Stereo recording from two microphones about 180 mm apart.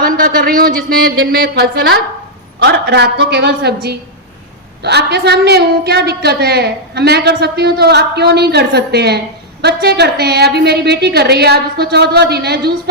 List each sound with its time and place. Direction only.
0.0 s a woman's voice: 55° right (ahead or behind)